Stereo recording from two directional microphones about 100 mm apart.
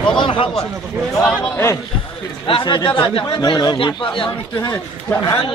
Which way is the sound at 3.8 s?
55° left (ahead or behind).